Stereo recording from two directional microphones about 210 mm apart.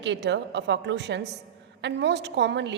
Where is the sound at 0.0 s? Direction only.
55° right (ahead or behind).